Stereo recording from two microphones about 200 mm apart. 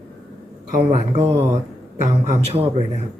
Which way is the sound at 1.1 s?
30° right (ahead or behind).